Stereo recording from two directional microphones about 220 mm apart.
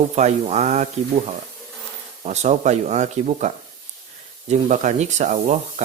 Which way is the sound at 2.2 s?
30° right (ahead or behind).